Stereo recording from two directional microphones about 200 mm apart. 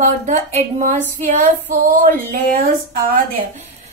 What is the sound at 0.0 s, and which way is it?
A woman's voice, 35° right (ahead or behind).